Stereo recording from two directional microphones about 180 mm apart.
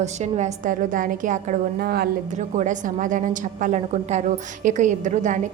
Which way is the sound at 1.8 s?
60° right (ahead or behind).